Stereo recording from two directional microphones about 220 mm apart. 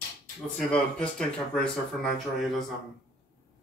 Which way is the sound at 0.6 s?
5° left (ahead or behind).